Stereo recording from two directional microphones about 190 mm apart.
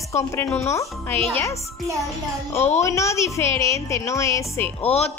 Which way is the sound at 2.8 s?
15° left (ahead or behind).